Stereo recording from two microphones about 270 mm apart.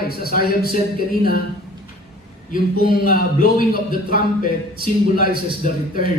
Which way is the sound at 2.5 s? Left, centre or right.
Left.